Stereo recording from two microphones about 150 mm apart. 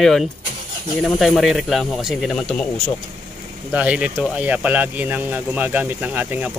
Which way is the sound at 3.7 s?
10° right (ahead or behind).